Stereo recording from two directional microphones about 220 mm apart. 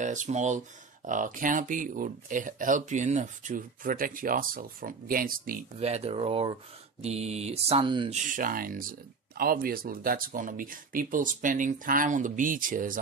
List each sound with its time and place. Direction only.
0.0 s speech: 35° right (ahead or behind)
7.0 s mantra: 30° right (ahead or behind)
8.4 s speech: 40° right (ahead or behind)